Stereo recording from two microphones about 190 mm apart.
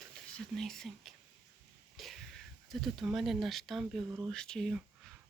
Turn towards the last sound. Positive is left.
turn(degrees=0)  # may be behind; listen again after turning